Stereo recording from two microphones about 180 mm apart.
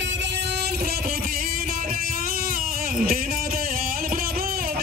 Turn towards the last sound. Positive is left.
turn(degrees=-55)  # may be behind; listen again after turning